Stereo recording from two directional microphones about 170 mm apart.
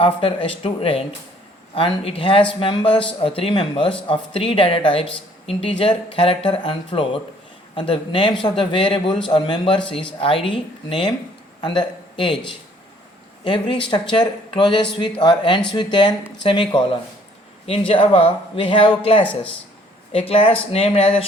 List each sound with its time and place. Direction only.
0.0 s a man's voice: 30° left (ahead or behind)
13.4 s speech: 30° left (ahead or behind)